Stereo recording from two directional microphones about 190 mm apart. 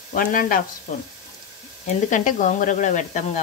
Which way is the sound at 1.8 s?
40° left (ahead or behind).